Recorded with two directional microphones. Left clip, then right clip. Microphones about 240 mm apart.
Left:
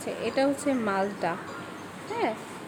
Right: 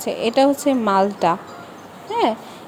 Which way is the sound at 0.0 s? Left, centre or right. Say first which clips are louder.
Right 10 dB; right.